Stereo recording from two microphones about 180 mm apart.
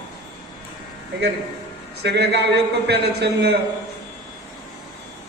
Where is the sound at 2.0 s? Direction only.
65° right (ahead or behind).